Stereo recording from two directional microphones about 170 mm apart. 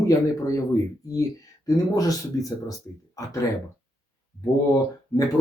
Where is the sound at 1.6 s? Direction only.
20° left (ahead or behind).